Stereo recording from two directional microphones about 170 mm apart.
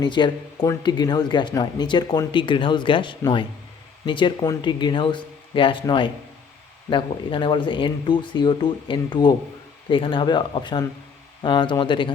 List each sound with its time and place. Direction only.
0.0 s speech: 25° left (ahead or behind)